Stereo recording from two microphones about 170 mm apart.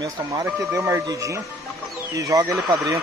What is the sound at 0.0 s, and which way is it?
Speech, 20° right (ahead or behind).